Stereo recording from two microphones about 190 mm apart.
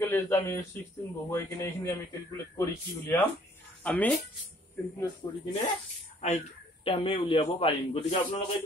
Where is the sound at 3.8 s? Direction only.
5° left (ahead or behind).